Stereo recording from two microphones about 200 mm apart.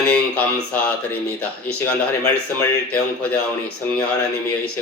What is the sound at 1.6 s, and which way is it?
Speech, 10° left (ahead or behind).